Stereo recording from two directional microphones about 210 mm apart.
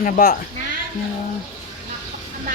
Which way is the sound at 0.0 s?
35° left (ahead or behind).